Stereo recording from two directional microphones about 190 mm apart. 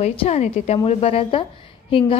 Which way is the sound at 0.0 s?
30° left (ahead or behind).